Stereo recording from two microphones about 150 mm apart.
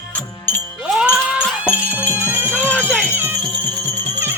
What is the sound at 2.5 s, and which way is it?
Music, 10° left (ahead or behind).